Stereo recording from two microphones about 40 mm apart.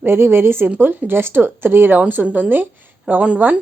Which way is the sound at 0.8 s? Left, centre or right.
Right.